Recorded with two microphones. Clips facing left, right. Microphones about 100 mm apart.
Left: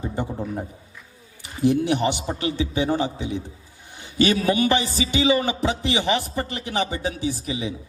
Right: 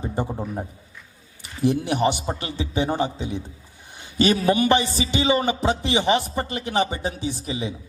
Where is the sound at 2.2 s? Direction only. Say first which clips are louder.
Left 3 dB; 30° right (ahead or behind).